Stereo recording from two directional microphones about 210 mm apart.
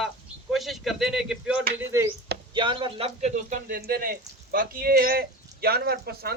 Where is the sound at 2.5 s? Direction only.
25° right (ahead or behind).